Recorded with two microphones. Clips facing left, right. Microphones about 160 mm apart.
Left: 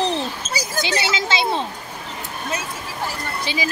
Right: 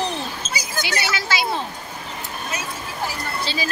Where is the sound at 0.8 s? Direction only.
25° left (ahead or behind).